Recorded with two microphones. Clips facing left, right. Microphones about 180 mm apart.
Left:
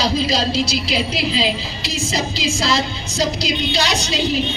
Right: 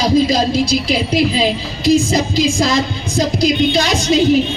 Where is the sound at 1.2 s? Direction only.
50° right (ahead or behind).